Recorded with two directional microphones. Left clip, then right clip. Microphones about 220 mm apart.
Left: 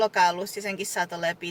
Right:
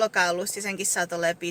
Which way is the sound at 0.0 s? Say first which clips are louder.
Left 1 dB; 20° right (ahead or behind).